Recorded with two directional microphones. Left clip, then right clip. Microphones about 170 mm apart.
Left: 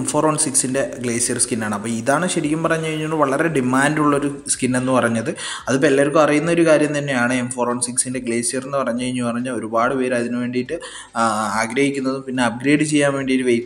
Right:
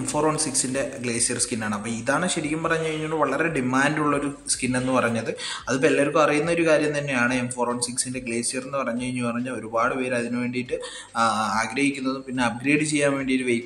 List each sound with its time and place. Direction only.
0.1 s speech: 25° left (ahead or behind)